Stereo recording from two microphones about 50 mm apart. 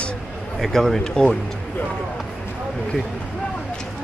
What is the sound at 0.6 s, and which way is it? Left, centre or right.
Speech, centre.